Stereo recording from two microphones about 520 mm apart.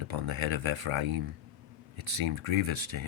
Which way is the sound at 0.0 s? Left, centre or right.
Right.